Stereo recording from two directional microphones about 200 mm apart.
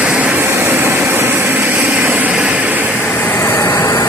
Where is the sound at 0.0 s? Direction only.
5° right (ahead or behind).